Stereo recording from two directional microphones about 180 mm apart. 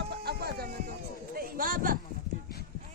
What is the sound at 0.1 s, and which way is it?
Music, 60° right (ahead or behind).